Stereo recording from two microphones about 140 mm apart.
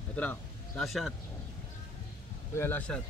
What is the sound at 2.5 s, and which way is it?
Speech, 15° left (ahead or behind).